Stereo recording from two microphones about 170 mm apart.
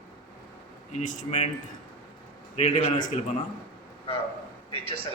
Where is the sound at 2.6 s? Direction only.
40° left (ahead or behind).